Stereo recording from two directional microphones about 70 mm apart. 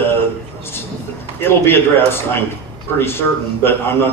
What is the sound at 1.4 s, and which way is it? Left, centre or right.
A man's voice, left.